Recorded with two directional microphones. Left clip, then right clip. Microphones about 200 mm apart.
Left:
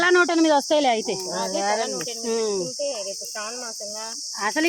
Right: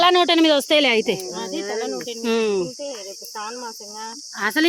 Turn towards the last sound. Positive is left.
turn(degrees=-45)  # may be behind; listen again after turning